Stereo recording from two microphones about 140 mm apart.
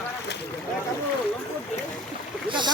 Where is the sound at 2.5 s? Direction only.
35° right (ahead or behind).